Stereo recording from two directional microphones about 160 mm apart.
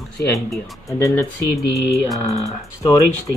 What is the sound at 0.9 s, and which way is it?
Speech, 20° left (ahead or behind).